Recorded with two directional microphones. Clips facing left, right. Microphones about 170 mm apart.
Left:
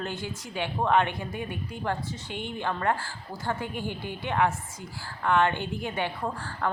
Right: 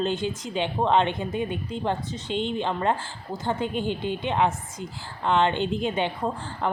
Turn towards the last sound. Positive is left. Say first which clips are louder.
# right 3 dB
turn(degrees=-20)  # may be behind; listen again after turning